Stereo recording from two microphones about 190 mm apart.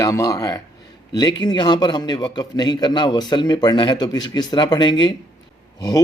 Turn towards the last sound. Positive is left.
turn(degrees=20)  # may be behind; listen again after turning